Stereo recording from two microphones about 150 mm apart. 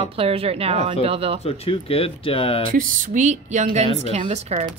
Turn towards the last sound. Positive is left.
turn(degrees=-45)  # may be behind; listen again after turning